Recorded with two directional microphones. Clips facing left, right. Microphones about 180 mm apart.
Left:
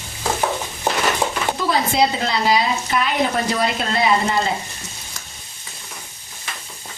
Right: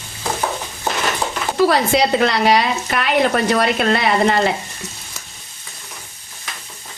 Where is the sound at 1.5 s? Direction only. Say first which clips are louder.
Right 5 dB; 70° right (ahead or behind).